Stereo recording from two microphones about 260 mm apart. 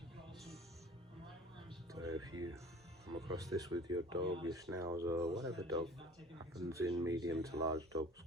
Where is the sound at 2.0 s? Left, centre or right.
Right.